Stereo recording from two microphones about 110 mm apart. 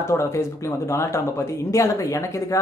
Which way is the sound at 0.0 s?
25° left (ahead or behind).